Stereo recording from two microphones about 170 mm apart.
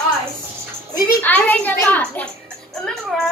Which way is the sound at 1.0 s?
10° left (ahead or behind).